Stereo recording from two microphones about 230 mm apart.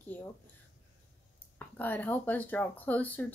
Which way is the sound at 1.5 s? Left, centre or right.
Centre.